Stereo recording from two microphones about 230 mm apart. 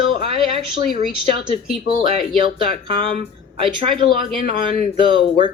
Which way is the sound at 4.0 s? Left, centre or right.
Right.